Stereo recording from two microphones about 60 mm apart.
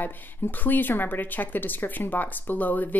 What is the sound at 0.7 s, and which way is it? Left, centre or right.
Speech, left.